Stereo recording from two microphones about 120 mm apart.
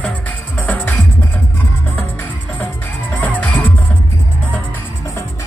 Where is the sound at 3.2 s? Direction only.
15° left (ahead or behind).